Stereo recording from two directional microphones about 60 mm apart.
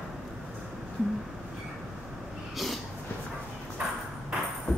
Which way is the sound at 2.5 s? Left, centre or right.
Centre.